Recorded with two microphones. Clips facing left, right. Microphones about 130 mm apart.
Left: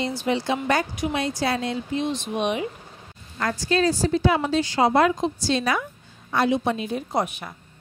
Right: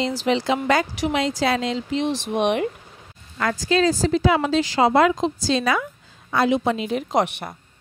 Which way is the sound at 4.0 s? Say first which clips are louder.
Right 2 dB; 90° right.